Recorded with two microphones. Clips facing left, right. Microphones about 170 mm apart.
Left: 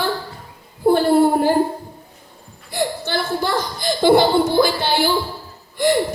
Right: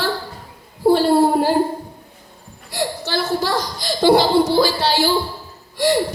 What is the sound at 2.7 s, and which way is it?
Chuckle, 55° left (ahead or behind).